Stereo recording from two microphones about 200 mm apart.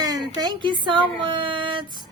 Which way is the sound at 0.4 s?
25° right (ahead or behind).